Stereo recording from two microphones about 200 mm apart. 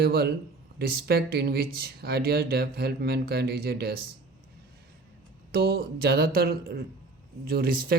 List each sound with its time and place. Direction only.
0.0 s speech: 50° right (ahead or behind)
5.5 s speech: 50° right (ahead or behind)